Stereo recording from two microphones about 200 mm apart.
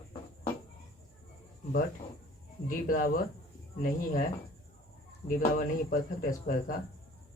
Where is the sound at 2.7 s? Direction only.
45° left (ahead or behind).